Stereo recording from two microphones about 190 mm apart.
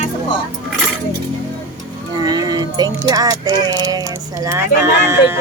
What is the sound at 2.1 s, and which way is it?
Speech, 20° right (ahead or behind).